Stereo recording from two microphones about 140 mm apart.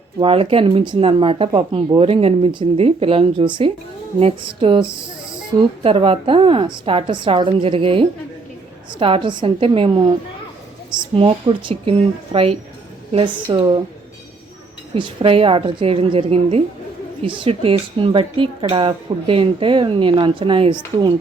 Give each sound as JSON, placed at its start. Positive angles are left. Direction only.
{"t": 0.2, "sound": "speech", "side_deg": -40}
{"t": 11.1, "sound": "speech", "side_deg": -40}
{"t": 14.9, "sound": "speech", "side_deg": -40}